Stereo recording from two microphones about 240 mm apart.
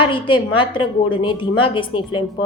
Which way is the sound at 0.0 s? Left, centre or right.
Centre.